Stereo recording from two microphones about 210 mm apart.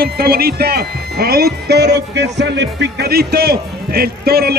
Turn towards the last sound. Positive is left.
turn(degrees=-45)  # may be behind; listen again after turning